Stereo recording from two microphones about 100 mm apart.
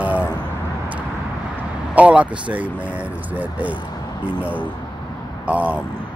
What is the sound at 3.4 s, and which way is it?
Speech, 15° right (ahead or behind).